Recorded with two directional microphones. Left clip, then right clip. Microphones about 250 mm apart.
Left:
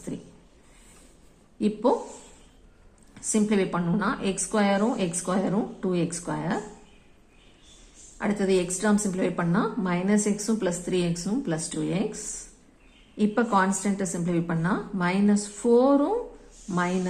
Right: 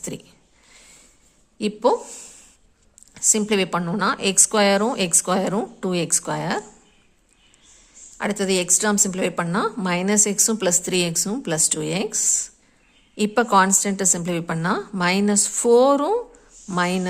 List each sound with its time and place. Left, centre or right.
0.1 s a woman's voice: right
1.5 s a woman's voice: right
3.2 s a woman's voice: right
8.2 s a woman's voice: right